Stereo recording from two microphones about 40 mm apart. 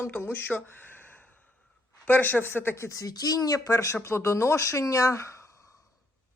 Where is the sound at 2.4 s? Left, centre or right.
Left.